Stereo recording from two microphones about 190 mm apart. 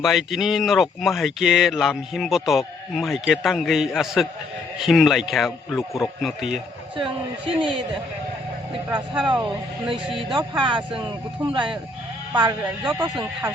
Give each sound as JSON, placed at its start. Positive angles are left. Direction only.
{"t": 0.0, "sound": "speech", "side_deg": 0}
{"t": 6.9, "sound": "a man's voice", "side_deg": -25}
{"t": 8.9, "sound": "speech", "side_deg": 0}
{"t": 9.3, "sound": "a man's voice", "side_deg": -25}
{"t": 12.3, "sound": "a man's voice", "side_deg": -25}